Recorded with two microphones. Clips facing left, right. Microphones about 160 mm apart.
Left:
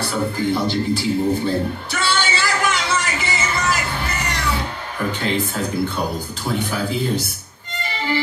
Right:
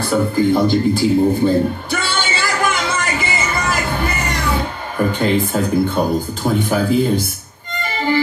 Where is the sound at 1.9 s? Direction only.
50° right (ahead or behind).